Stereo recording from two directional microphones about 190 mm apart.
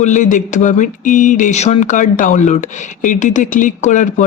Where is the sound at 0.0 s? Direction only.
40° left (ahead or behind).